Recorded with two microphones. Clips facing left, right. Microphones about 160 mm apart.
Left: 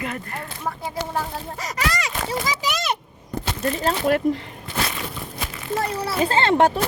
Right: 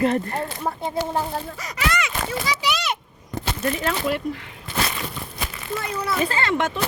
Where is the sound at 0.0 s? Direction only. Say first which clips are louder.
Right 9 dB; 35° right (ahead or behind).